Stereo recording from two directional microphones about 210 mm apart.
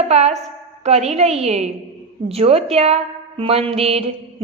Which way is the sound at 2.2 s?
30° right (ahead or behind).